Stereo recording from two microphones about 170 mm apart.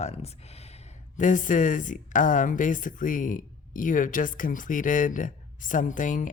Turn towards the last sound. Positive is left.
turn(degrees=50)  # may be behind; listen again after turning